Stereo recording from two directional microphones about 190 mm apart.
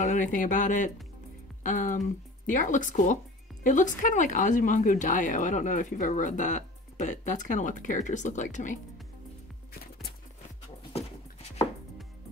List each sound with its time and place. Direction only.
0.0 s speech: 40° left (ahead or behind)